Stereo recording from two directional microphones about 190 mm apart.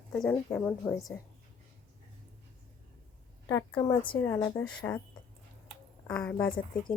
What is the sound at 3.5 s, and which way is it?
A woman's voice, 15° left (ahead or behind).